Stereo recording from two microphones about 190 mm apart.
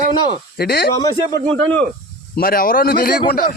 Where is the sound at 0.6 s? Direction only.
50° left (ahead or behind).